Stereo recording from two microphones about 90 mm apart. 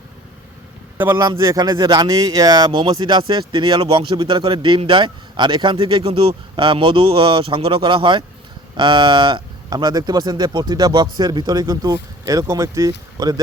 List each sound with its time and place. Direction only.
0.9 s a man's voice: 30° right (ahead or behind)
1.6 s speech: 50° right (ahead or behind)